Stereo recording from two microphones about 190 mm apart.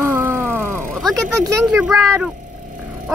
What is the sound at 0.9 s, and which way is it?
Speech, centre (ahead or behind).